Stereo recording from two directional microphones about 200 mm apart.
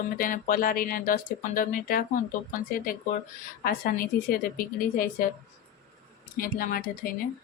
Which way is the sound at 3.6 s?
45° left (ahead or behind).